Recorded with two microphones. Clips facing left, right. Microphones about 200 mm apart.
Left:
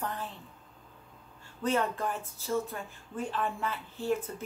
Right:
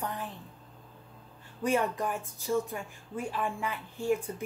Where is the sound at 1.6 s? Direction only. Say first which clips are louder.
Right 1 dB; 15° right (ahead or behind).